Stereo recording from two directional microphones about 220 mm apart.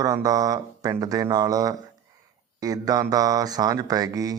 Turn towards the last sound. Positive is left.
turn(degrees=-15)  # may be behind; listen again after turning